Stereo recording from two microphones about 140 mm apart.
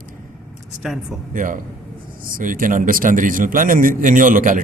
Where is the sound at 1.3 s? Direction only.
70° right (ahead or behind).